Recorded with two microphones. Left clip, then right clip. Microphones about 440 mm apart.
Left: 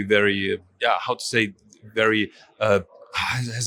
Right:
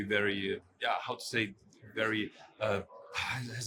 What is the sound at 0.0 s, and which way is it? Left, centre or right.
Speech, left.